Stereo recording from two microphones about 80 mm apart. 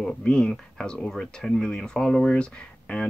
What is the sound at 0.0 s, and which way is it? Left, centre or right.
Speech, centre.